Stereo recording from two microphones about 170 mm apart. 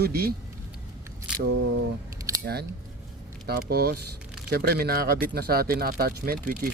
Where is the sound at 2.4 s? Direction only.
70° right (ahead or behind).